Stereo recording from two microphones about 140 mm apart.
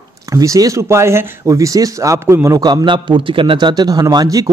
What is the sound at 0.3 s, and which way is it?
A man's voice, 25° right (ahead or behind).